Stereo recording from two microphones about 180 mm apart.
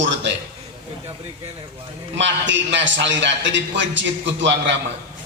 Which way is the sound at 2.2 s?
90° right.